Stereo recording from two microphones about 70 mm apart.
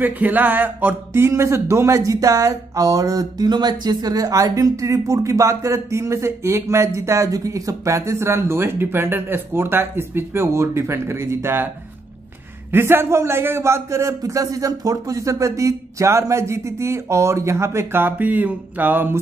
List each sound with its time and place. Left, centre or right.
0.0 s a man's voice: right
4.5 s speech: right
12.7 s a man's voice: right
18.0 s a sound: right